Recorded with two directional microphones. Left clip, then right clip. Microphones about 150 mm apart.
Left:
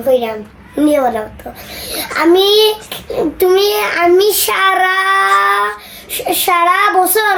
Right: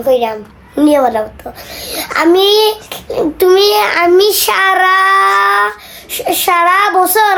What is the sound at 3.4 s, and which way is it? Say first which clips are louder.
A child's voice: right 3 dB; 50° right (ahead or behind).